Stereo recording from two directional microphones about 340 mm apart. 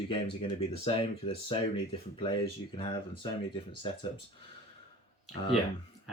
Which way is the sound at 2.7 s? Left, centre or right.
Centre.